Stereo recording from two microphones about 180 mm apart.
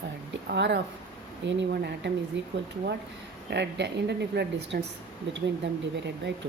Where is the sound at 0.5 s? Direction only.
75° right (ahead or behind).